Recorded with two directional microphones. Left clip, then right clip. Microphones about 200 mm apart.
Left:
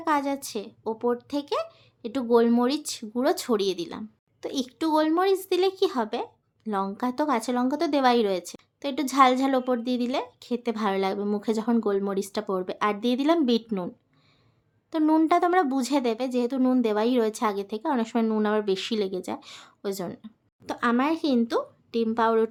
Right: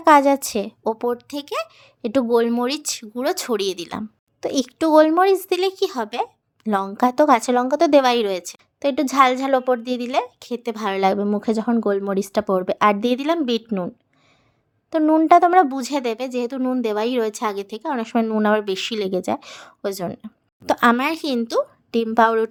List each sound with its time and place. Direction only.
0.0 s speech: 40° right (ahead or behind); by 16.8 s 20° right (ahead or behind)
16.8 s speech: 30° right (ahead or behind)
20.7 s speech: 40° right (ahead or behind)